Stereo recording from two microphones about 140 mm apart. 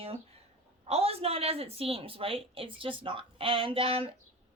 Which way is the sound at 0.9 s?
45° right (ahead or behind).